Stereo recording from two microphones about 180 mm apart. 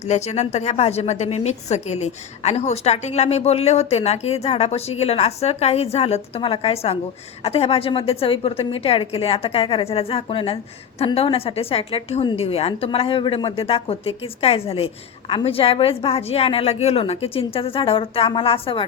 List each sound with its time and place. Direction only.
0.1 s a woman's voice: 40° left (ahead or behind)